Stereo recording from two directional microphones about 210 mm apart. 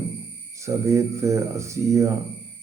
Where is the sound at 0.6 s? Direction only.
15° right (ahead or behind).